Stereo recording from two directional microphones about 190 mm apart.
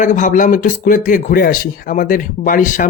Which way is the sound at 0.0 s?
40° left (ahead or behind).